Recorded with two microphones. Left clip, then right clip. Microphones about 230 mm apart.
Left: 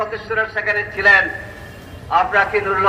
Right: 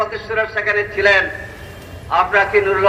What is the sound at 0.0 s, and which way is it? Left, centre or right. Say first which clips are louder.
A man's voice: right 1 dB; right.